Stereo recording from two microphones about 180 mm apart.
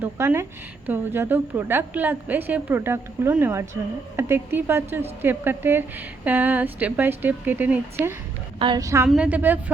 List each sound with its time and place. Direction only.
0.0 s a woman's voice: 10° right (ahead or behind)
8.5 s a woman's voice: 25° right (ahead or behind)
9.0 s a woman's voice: 5° right (ahead or behind)